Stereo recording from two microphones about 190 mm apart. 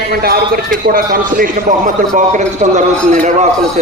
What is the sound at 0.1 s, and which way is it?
A man's voice, 50° right (ahead or behind).